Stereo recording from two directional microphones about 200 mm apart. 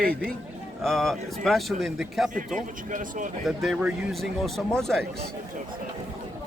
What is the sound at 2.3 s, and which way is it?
Speech, 40° right (ahead or behind).